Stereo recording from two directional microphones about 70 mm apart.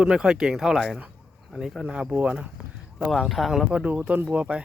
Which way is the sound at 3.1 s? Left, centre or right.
Centre.